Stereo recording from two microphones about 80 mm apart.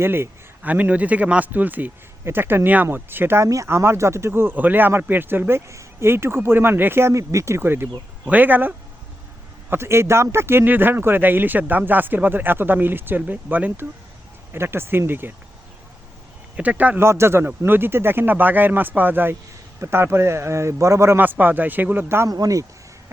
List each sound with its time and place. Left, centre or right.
0.0 s a man's voice: right
0.6 s speech: centre
14.5 s speech: right
16.6 s speech: centre
17.0 s a man's voice: right
21.2 s speech: right
22.3 s speech: right